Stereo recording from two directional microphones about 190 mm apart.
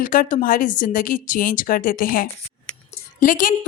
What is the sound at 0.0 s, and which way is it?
A woman's voice, 45° left (ahead or behind).